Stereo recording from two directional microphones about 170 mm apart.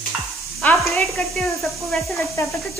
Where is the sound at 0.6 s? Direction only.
Centre (ahead or behind).